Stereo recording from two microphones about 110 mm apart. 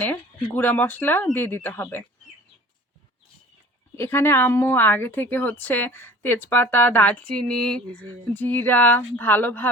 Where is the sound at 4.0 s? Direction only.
20° left (ahead or behind).